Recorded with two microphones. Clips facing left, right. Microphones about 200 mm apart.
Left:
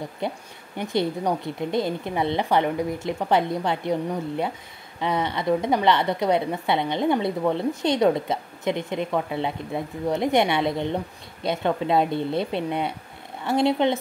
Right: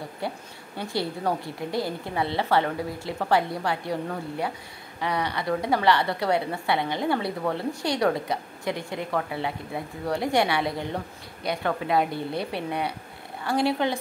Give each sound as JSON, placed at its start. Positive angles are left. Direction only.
{"t": 0.2, "sound": "a woman's voice", "side_deg": 20}